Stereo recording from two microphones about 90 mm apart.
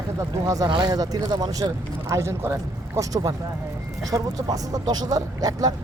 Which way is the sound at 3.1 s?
45° right (ahead or behind).